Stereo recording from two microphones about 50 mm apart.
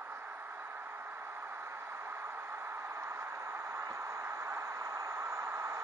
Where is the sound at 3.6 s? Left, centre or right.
Right.